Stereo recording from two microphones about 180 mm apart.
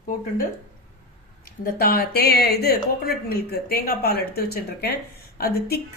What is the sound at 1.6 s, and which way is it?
Speech, 55° left (ahead or behind).